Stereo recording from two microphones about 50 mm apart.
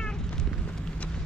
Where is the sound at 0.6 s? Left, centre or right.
Left.